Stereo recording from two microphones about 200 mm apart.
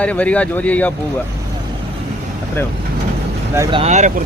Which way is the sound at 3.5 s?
15° right (ahead or behind).